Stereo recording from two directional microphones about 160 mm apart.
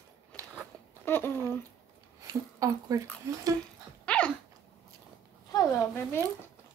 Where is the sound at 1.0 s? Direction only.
15° left (ahead or behind).